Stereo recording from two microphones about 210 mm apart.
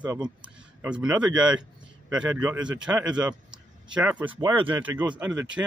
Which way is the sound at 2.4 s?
15° right (ahead or behind).